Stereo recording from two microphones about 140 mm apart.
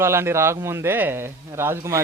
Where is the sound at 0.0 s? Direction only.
20° right (ahead or behind).